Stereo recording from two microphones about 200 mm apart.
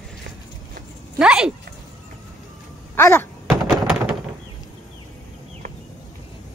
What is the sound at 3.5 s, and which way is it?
Thunk, centre (ahead or behind).